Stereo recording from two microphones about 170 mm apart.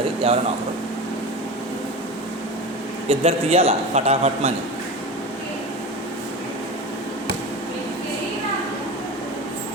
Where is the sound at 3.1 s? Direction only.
35° right (ahead or behind).